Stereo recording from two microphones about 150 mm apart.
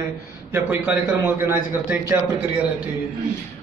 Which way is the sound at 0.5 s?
15° right (ahead or behind).